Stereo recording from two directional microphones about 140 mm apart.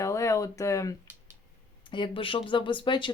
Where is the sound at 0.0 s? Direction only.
20° left (ahead or behind).